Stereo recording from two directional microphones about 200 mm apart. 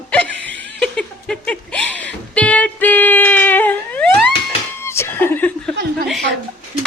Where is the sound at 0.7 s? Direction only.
5° left (ahead or behind).